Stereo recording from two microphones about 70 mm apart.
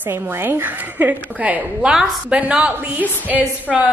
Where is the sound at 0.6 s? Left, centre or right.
Right.